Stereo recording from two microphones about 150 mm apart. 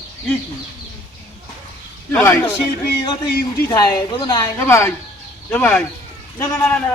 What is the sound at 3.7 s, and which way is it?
Speech, 25° left (ahead or behind).